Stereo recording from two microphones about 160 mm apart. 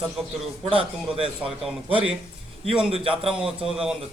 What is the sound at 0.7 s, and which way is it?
Speech, 35° right (ahead or behind).